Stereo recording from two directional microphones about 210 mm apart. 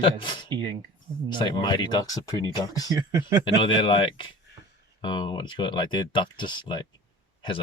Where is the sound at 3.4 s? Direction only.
25° left (ahead or behind).